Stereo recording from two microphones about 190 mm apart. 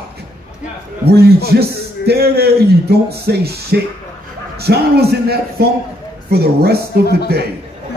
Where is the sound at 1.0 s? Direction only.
55° right (ahead or behind).